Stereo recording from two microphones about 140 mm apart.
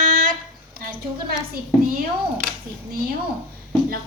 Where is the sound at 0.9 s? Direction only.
90° right.